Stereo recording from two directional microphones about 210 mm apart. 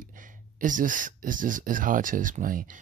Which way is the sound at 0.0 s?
40° right (ahead or behind).